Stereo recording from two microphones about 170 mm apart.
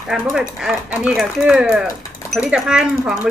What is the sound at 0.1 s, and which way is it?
Speech, centre (ahead or behind).